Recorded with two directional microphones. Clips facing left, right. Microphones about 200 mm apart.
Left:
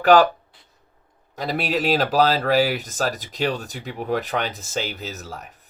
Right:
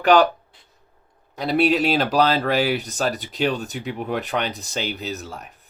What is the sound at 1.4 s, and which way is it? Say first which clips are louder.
Speech: right 5 dB; 45° left (ahead or behind).